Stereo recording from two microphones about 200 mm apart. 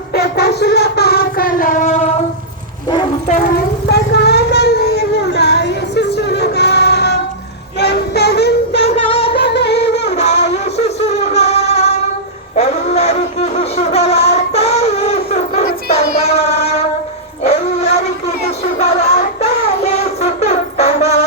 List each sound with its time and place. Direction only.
0.1 s a sound: 50° left (ahead or behind); by 2.1 s 35° left (ahead or behind)
3.8 s vehicle: 55° left (ahead or behind)
5.3 s music: 55° left (ahead or behind)
7.8 s child singing: 55° left (ahead or behind)
8.7 s a sound: 30° left (ahead or behind)
9.3 s music: 55° left (ahead or behind)
10.4 s music: 35° left (ahead or behind)
12.5 s a sound: 30° left (ahead or behind)
18.4 s music: 30° left (ahead or behind)